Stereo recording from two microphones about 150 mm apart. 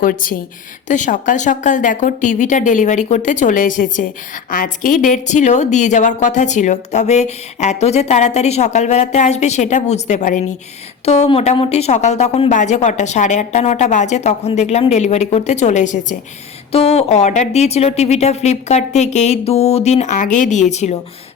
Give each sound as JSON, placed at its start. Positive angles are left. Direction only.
{"t": 0.0, "sound": "a woman's voice", "side_deg": 65}
{"t": 0.9, "sound": "speech", "side_deg": 55}
{"t": 16.7, "sound": "speech", "side_deg": 40}